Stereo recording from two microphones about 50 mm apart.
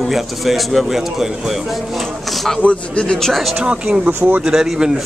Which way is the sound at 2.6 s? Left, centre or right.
Left.